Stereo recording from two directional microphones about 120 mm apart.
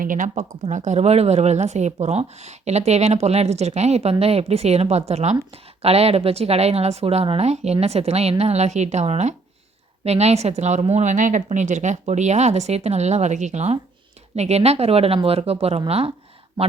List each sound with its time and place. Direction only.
0.1 s a woman's voice: 85° right; by 16.1 s 55° right (ahead or behind)